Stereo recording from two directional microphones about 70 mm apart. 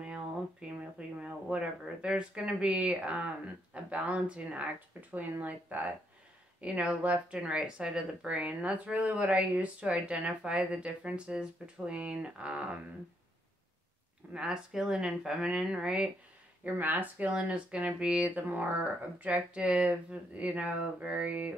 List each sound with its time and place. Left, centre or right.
0.0 s speech: centre
14.3 s speech: centre
16.6 s speech: right